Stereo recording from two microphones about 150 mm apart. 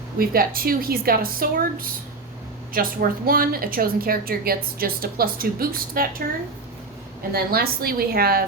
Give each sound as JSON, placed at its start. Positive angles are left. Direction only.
{"t": 0.2, "sound": "a woman's voice", "side_deg": -80}
{"t": 2.7, "sound": "a woman's voice", "side_deg": -75}
{"t": 7.3, "sound": "a woman's voice", "side_deg": -90}